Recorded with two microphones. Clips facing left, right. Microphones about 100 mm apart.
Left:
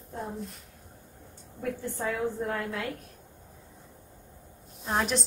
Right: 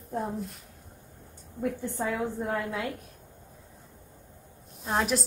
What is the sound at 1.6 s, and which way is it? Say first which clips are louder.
A woman's voice: right 2 dB; 20° right (ahead or behind).